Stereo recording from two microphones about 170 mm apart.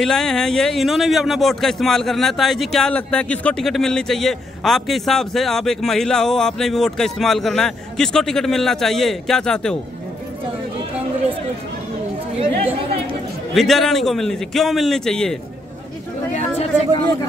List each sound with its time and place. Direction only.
0.0 s speech: centre (ahead or behind)
12.4 s a woman's voice: 35° right (ahead or behind)
13.6 s speech: centre (ahead or behind)
16.3 s chatter: 35° left (ahead or behind)